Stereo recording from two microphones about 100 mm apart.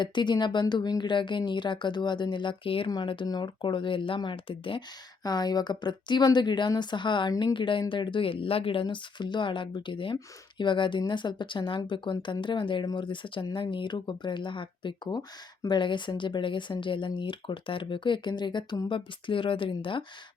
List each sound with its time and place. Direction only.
0.0 s speech: 50° left (ahead or behind)
5.2 s speech: 45° left (ahead or behind)